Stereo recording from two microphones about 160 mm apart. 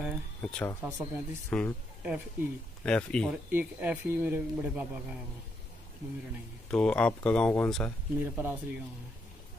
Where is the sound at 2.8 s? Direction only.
5° left (ahead or behind).